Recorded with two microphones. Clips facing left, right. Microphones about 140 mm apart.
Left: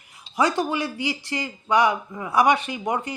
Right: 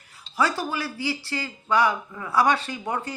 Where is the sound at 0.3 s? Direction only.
20° left (ahead or behind).